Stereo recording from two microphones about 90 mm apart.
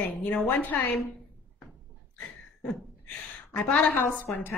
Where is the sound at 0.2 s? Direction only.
15° left (ahead or behind).